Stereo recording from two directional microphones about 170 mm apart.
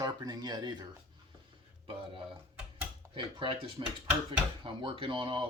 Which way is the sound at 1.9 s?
30° right (ahead or behind).